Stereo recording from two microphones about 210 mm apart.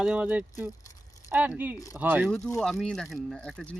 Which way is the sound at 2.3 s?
15° left (ahead or behind).